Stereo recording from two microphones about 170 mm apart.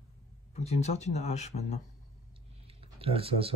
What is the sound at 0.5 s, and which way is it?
Speech, 40° left (ahead or behind).